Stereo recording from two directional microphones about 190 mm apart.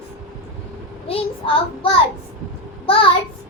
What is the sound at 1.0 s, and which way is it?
Speech, 30° left (ahead or behind).